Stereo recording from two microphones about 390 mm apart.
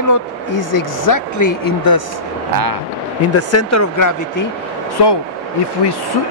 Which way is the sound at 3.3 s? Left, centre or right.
Left.